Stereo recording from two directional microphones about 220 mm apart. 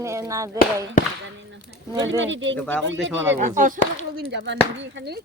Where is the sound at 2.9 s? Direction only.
55° right (ahead or behind).